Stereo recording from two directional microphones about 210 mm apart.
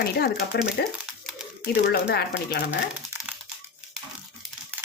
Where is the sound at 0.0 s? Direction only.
50° left (ahead or behind).